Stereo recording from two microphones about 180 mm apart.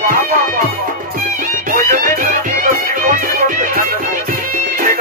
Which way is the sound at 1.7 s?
50° right (ahead or behind).